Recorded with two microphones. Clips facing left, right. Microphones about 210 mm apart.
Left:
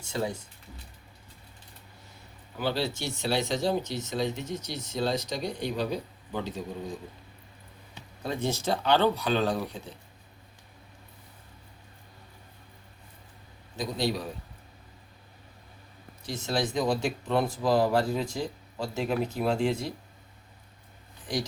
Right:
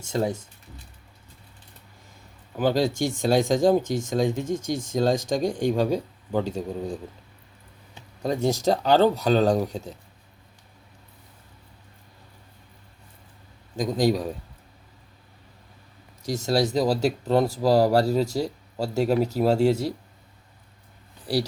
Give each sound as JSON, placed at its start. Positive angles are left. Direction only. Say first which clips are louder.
{"t": 0.0, "sound": "speech", "louder": "right 6 dB", "side_deg": -45}
{"t": 2.6, "sound": "speech", "louder": "right 8 dB", "side_deg": -45}
{"t": 8.2, "sound": "speech", "louder": "right 7 dB", "side_deg": -40}
{"t": 13.7, "sound": "speech", "louder": "right 7 dB", "side_deg": -45}
{"t": 16.2, "sound": "speech", "louder": "right 7 dB", "side_deg": -45}
{"t": 21.3, "sound": "speech", "louder": "right 6 dB", "side_deg": -35}